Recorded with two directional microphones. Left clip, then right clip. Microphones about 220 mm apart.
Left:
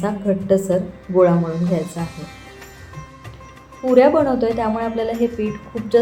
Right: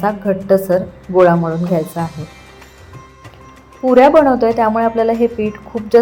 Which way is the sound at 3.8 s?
30° right (ahead or behind).